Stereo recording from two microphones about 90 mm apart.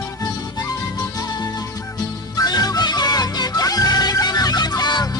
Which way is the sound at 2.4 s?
45° left (ahead or behind).